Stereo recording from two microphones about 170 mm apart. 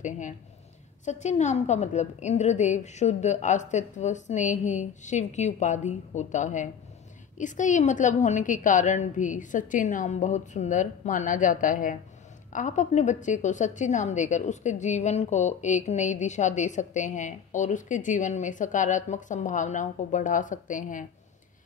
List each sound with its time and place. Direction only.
1.0 s a woman's voice: 45° left (ahead or behind)